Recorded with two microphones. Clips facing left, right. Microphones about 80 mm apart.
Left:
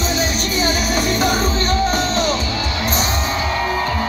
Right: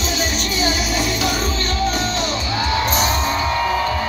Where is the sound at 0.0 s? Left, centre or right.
Left.